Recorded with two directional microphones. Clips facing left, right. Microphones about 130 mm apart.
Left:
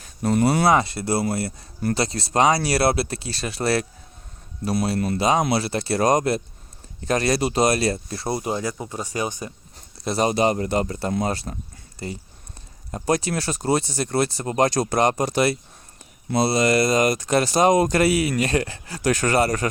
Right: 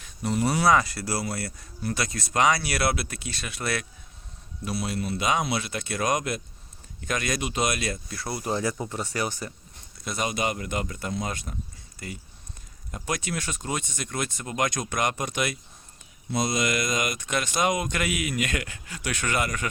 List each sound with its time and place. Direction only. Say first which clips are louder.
0.0 s speech: left 6 dB; 55° left (ahead or behind)
0.7 s speech: left 3 dB; 25° left (ahead or behind)
4.9 s speech: left 6 dB; 50° left (ahead or behind)
5.5 s speech: left 7 dB; 35° left (ahead or behind); by 9.5 s 20° left (ahead or behind)
10.0 s speech: left 8 dB; 35° left (ahead or behind)